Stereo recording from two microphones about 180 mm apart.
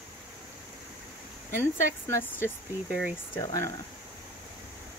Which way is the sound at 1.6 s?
15° left (ahead or behind).